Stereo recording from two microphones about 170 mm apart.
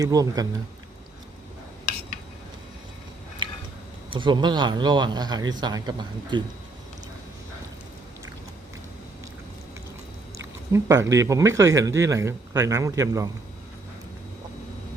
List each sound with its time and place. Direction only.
0.0 s speech: 20° right (ahead or behind)
4.1 s speech: 30° right (ahead or behind)
10.3 s speech: 15° right (ahead or behind)